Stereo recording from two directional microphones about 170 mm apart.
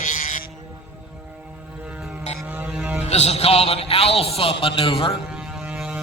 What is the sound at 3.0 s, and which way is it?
Speech, 40° left (ahead or behind).